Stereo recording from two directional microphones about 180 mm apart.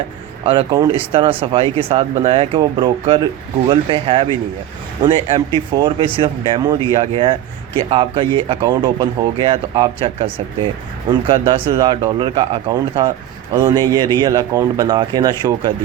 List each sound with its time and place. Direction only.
0.4 s speech: 25° right (ahead or behind)
5.5 s speech: 25° right (ahead or behind)